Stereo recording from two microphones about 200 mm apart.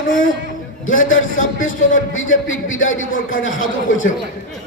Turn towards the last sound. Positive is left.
turn(degrees=75)  # may be behind; listen again after turning